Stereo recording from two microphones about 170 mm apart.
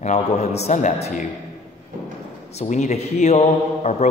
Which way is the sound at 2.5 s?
40° left (ahead or behind).